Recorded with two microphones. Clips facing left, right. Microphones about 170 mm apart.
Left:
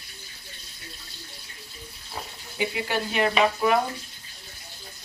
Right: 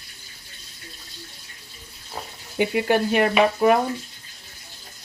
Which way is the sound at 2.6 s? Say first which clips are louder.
Right 7 dB; 50° right (ahead or behind).